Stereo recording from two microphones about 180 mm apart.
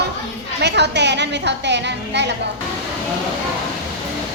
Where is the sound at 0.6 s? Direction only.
70° right (ahead or behind).